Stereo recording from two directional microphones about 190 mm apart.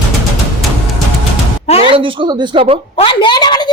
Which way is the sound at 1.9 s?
25° right (ahead or behind).